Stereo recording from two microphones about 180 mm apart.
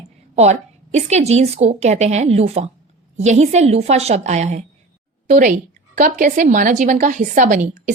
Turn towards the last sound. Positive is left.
turn(degrees=-45)  # may be behind; listen again after turning